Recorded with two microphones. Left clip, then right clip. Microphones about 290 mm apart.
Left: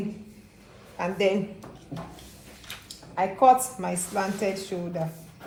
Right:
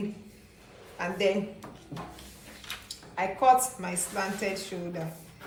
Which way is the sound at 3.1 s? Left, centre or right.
Left.